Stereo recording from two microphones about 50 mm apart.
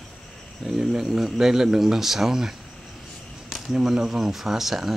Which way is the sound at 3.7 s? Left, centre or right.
Centre.